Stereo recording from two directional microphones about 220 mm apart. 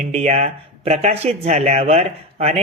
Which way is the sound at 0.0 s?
30° right (ahead or behind).